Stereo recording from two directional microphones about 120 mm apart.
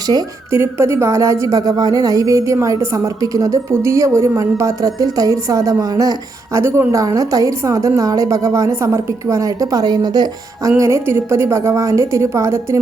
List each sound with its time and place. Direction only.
0.5 s a woman's voice: 20° right (ahead or behind)
10.8 s a woman's voice: 25° right (ahead or behind)